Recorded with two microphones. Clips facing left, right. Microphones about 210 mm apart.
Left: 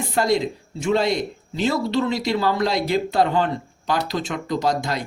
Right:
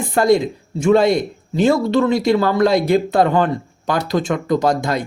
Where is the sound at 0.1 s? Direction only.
50° right (ahead or behind).